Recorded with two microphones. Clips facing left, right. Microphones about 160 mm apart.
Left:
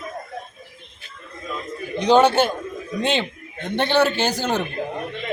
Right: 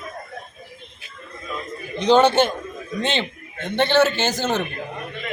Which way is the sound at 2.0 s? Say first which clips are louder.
Even; 10° left (ahead or behind).